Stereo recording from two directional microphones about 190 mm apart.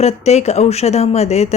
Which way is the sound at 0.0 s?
35° left (ahead or behind).